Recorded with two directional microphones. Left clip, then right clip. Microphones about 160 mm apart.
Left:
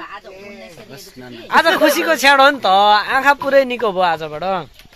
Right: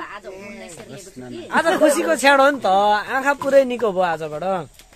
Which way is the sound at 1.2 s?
10° left (ahead or behind).